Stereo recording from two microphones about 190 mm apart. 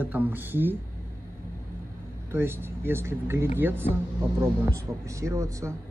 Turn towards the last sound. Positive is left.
turn(degrees=-15)  # may be behind; listen again after turning